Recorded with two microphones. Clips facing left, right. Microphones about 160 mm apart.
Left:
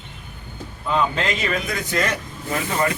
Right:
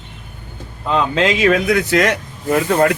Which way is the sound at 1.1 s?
85° right.